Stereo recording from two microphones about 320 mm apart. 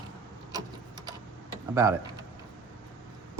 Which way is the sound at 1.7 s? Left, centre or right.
Centre.